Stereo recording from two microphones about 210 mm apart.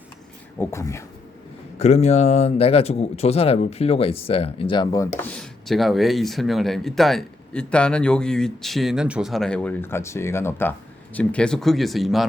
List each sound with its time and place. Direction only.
0.6 s speech: 15° left (ahead or behind)
1.8 s speech: 30° left (ahead or behind)
5.2 s speech: 5° left (ahead or behind)